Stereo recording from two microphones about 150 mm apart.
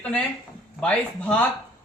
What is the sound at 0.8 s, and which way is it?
Speech, 10° left (ahead or behind).